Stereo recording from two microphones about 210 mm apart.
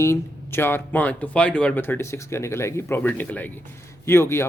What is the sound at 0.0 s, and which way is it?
Speech, 10° left (ahead or behind).